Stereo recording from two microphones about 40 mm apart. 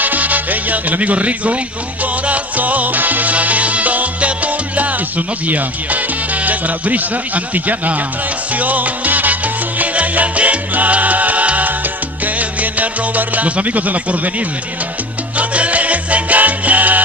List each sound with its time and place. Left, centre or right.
0.0 s music: right
8.5 s salsa music: right
12.4 s speech: right
15.3 s salsa music: right